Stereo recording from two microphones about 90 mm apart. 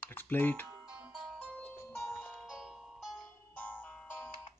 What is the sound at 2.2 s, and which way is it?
Music, centre (ahead or behind).